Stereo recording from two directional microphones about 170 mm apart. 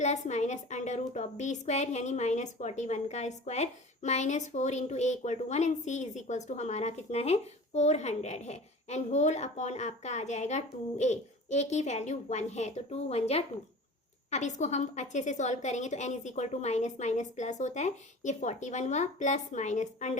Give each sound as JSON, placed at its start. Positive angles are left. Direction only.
{"t": 0.0, "sound": "a woman's voice", "side_deg": 45}